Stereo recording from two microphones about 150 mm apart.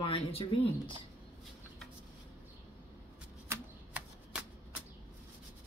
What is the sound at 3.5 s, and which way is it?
Shuffling cards, 10° right (ahead or behind).